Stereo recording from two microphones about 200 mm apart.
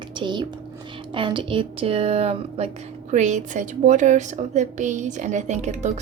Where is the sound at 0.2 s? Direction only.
20° right (ahead or behind).